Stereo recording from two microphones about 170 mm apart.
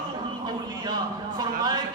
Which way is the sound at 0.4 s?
25° right (ahead or behind).